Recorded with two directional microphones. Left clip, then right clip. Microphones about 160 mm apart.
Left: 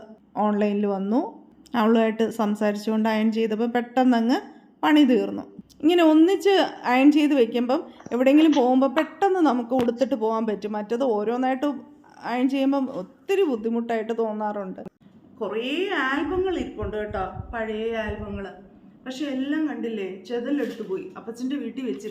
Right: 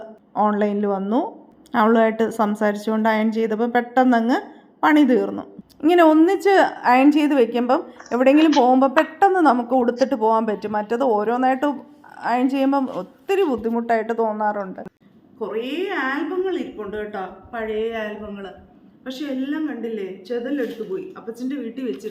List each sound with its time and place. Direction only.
0.3 s a woman's voice: 5° left (ahead or behind)
15.4 s a woman's voice: 15° left (ahead or behind); by 18.5 s 10° right (ahead or behind)
19.0 s a woman's voice: centre (ahead or behind); by 21.9 s 15° left (ahead or behind)